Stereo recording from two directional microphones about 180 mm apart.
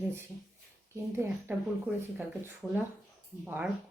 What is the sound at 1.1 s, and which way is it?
Speech, 15° right (ahead or behind).